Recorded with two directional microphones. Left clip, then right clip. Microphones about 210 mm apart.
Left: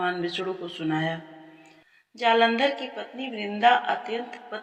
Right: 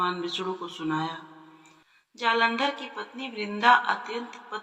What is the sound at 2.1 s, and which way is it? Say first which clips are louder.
Speech: left 3 dB; centre (ahead or behind).